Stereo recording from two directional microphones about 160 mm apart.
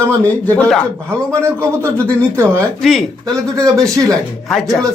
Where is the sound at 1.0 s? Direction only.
15° right (ahead or behind).